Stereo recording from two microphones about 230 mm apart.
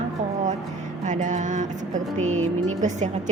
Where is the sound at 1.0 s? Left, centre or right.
Right.